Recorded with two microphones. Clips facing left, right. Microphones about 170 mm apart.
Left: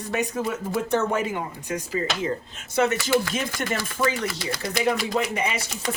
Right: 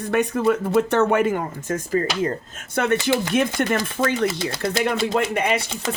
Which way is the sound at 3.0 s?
60° right (ahead or behind).